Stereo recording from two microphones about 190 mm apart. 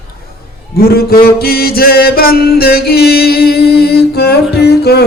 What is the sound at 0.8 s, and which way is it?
Music, 55° left (ahead or behind).